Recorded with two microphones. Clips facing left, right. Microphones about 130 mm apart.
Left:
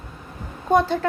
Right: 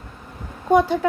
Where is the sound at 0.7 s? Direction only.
10° right (ahead or behind).